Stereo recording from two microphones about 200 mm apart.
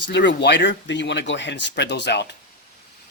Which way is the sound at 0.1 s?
60° left (ahead or behind).